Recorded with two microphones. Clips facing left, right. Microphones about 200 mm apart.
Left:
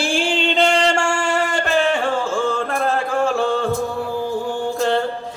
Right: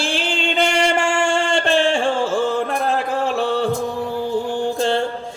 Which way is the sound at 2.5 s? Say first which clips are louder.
Right 1 dB; 20° right (ahead or behind).